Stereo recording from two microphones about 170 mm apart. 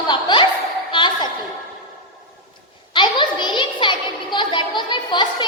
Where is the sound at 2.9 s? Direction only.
25° left (ahead or behind).